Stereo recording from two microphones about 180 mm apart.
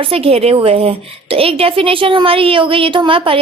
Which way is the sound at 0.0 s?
30° right (ahead or behind).